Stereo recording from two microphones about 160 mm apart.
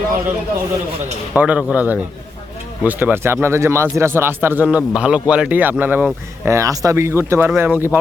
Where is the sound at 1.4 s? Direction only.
10° right (ahead or behind).